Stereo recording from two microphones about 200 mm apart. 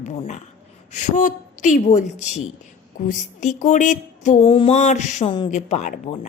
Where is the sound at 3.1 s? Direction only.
35° left (ahead or behind).